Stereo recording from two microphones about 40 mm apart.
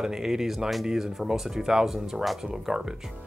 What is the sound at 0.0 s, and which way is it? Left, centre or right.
Speech, centre.